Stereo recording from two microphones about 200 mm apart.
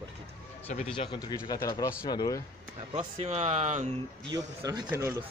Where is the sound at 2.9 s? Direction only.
30° right (ahead or behind).